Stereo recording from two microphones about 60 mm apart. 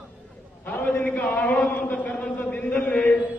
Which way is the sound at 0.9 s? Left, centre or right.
Left.